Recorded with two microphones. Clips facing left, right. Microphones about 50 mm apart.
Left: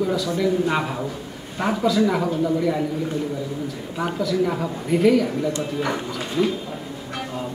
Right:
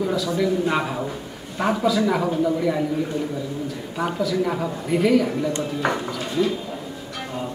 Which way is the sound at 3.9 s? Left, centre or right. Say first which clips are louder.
Even; centre.